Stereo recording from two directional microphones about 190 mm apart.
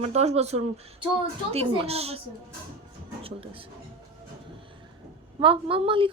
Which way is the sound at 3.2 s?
30° right (ahead or behind).